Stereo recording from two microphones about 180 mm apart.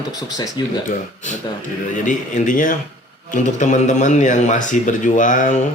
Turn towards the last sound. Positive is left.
turn(degrees=45)  # may be behind; listen again after turning